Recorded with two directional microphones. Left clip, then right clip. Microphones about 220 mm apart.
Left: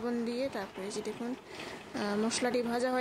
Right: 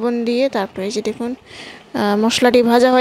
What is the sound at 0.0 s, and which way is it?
Speech, 35° right (ahead or behind).